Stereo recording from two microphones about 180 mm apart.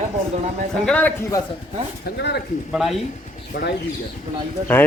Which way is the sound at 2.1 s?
70° left (ahead or behind).